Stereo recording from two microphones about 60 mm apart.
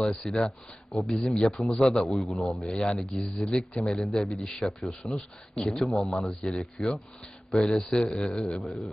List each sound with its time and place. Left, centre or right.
0.2 s a man's voice: centre
2.6 s a man's voice: centre
5.0 s speech: left
5.8 s a man's voice: centre
8.6 s a man's voice: centre